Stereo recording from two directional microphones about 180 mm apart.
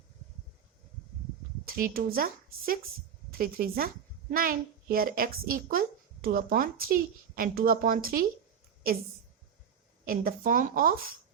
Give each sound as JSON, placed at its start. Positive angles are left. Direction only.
{"t": 1.6, "sound": "a child's voice", "side_deg": -55}
{"t": 10.1, "sound": "a child's voice", "side_deg": -50}